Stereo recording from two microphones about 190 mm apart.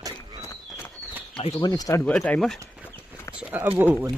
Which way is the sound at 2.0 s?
5° left (ahead or behind).